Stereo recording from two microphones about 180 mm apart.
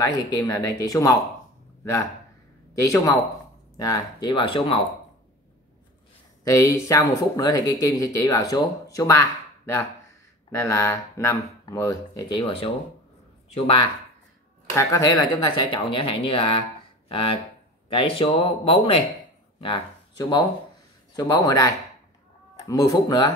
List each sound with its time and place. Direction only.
0.0 s speech: 20° left (ahead or behind)
2.8 s speech: 15° left (ahead or behind)
6.4 s speech: 15° left (ahead or behind)
14.8 s speech: 15° left (ahead or behind)